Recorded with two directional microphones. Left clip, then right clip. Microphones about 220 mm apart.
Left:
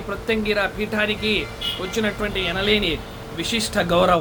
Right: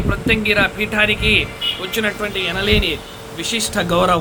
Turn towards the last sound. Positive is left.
turn(degrees=-5)  # may be behind; listen again after turning